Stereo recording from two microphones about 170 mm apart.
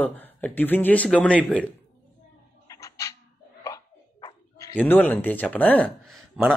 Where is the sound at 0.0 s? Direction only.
10° left (ahead or behind).